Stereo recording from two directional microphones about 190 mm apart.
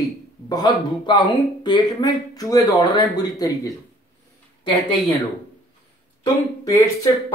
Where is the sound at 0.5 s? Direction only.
20° left (ahead or behind).